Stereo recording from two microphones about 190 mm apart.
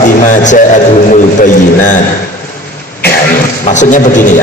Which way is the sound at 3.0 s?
45° left (ahead or behind).